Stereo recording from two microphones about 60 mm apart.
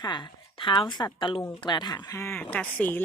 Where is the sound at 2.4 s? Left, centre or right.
Left.